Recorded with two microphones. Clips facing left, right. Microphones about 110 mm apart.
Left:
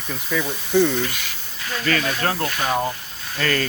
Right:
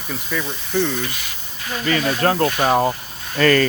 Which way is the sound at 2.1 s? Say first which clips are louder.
Right 6 dB; 35° right (ahead or behind).